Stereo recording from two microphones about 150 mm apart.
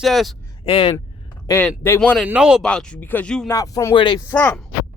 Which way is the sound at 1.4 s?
20° left (ahead or behind).